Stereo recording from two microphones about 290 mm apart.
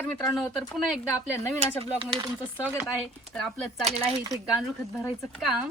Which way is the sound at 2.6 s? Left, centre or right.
Centre.